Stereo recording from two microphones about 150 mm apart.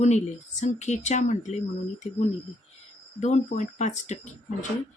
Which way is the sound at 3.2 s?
50° left (ahead or behind).